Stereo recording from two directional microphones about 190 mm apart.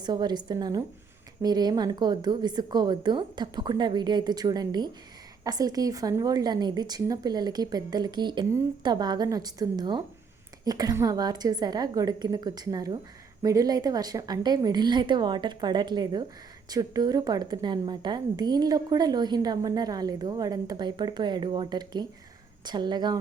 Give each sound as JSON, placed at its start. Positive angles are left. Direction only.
{"t": 0.0, "sound": "a woman's voice", "side_deg": -20}